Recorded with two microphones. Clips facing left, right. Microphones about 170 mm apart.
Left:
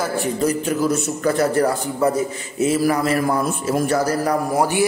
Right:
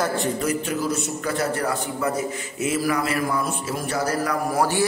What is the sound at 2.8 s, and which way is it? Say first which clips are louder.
A man's voice: left 5 dB; 40° left (ahead or behind).